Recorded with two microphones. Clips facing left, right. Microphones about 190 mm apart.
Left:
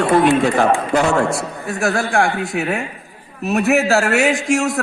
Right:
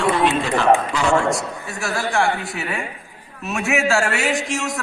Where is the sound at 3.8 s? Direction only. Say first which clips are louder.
Left 3 dB; 40° left (ahead or behind).